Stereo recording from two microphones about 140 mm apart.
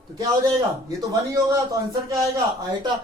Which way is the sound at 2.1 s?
25° right (ahead or behind).